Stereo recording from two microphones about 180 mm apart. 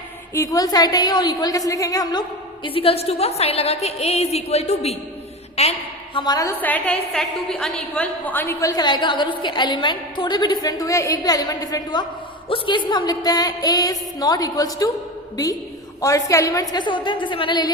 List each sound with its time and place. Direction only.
0.3 s a woman's voice: 20° left (ahead or behind); by 5.7 s 35° left (ahead or behind)
6.1 s a woman's voice: 20° left (ahead or behind)
16.0 s a woman's voice: 20° left (ahead or behind)